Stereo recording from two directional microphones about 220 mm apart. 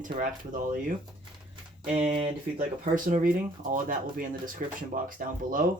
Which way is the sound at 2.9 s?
35° right (ahead or behind).